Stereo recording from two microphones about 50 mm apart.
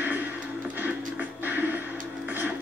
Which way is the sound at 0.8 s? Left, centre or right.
Right.